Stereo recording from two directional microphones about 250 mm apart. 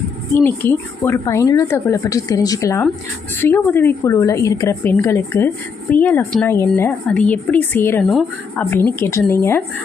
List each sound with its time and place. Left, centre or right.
0.3 s a woman's voice: centre